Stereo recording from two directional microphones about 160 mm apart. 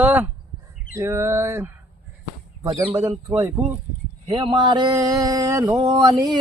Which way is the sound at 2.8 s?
10° right (ahead or behind).